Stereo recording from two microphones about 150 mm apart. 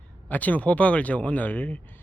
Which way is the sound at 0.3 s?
10° left (ahead or behind).